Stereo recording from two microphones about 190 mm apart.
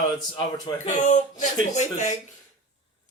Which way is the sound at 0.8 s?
40° left (ahead or behind).